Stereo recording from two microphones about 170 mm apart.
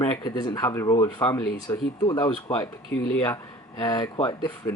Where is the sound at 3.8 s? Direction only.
25° left (ahead or behind).